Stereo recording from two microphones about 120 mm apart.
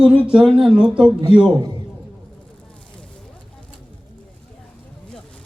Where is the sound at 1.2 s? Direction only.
40° right (ahead or behind).